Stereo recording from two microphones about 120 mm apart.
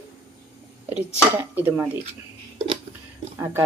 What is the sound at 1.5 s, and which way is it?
Speech, 15° right (ahead or behind).